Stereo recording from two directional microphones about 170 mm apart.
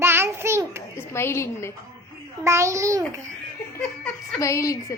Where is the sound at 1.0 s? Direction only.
15° left (ahead or behind).